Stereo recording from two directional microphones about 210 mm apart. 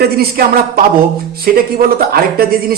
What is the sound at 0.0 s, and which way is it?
Speech, 50° right (ahead or behind).